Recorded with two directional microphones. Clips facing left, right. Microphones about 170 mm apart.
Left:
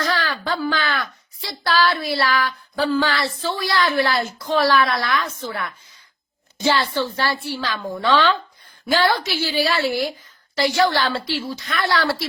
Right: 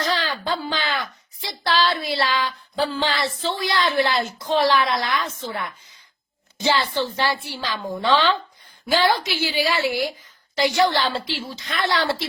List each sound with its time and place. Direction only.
0.0 s a woman's voice: 20° right (ahead or behind)